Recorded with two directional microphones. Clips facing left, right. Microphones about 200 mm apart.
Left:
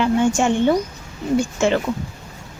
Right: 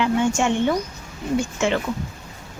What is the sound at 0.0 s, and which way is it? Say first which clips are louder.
Speech: left 3 dB; 35° left (ahead or behind).